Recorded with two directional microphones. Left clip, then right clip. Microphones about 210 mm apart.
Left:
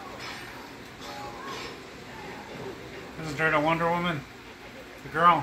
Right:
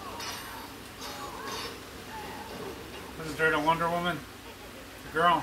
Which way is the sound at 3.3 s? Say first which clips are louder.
Left 1 dB; 15° left (ahead or behind).